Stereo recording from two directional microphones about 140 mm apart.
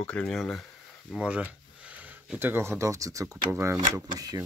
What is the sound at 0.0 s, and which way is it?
Speech, 5° left (ahead or behind).